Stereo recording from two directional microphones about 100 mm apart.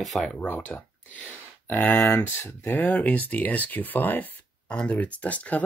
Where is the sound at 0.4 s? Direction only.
15° left (ahead or behind).